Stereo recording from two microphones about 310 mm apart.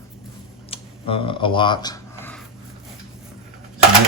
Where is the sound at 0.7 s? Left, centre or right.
Centre.